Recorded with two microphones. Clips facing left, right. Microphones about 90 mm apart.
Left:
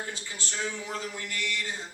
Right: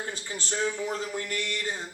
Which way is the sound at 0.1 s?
40° right (ahead or behind).